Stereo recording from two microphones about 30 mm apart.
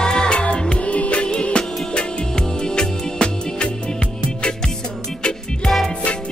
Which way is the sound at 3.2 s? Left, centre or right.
Left.